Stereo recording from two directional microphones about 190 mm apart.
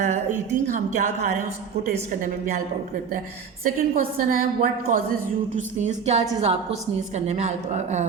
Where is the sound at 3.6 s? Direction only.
45° right (ahead or behind).